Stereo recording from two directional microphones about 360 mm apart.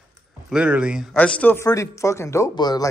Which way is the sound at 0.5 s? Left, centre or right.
Centre.